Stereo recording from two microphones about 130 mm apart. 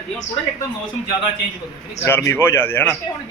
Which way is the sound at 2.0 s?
20° left (ahead or behind).